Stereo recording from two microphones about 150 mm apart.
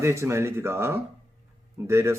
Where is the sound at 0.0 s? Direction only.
20° right (ahead or behind).